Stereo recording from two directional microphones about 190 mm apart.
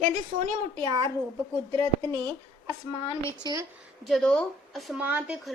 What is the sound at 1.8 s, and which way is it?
Speech, 10° left (ahead or behind).